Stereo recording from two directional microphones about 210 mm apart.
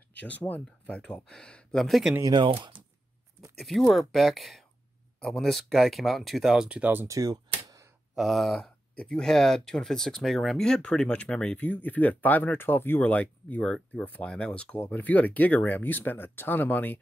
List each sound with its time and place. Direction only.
0.3 s speech: 5° left (ahead or behind)
2.1 s speech: 20° right (ahead or behind)
3.5 s speech: centre (ahead or behind); by 7.8 s 15° right (ahead or behind)
8.1 s speech: centre (ahead or behind)